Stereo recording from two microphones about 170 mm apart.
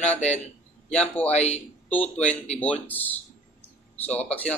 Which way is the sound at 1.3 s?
40° left (ahead or behind).